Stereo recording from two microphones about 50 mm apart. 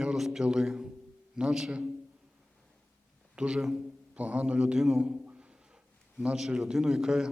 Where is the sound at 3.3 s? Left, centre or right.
Centre.